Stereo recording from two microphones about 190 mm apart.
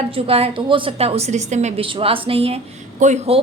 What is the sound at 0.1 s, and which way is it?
A woman's voice, 30° right (ahead or behind).